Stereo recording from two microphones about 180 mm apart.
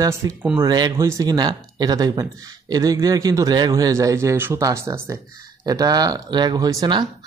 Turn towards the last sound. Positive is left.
turn(degrees=-20)  # may be behind; listen again after turning